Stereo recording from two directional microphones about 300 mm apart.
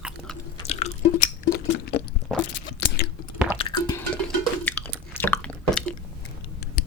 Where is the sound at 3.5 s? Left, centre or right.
Centre.